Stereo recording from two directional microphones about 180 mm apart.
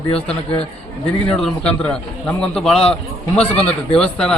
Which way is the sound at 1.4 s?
5° left (ahead or behind).